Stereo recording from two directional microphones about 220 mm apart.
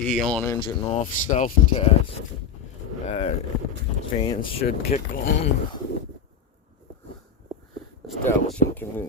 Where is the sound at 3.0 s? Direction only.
25° left (ahead or behind).